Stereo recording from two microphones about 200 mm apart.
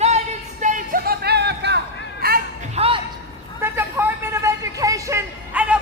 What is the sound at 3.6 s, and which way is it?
Vehicle, 10° right (ahead or behind).